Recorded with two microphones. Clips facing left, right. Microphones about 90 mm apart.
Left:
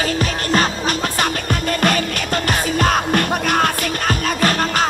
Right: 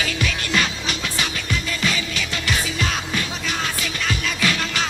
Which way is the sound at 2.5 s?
50° left (ahead or behind).